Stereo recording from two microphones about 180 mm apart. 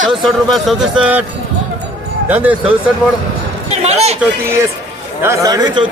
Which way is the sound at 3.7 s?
35° right (ahead or behind).